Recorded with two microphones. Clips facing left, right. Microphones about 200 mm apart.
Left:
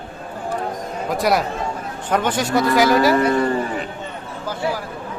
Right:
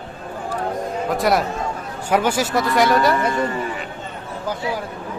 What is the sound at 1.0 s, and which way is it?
A man's voice, centre (ahead or behind).